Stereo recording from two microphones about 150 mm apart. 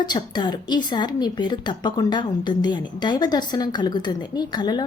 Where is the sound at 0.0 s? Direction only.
30° left (ahead or behind).